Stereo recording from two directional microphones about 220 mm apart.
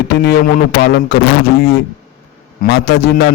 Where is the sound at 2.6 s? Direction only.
50° left (ahead or behind).